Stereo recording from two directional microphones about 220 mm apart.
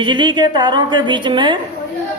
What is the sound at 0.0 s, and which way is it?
A woman's voice, 20° right (ahead or behind).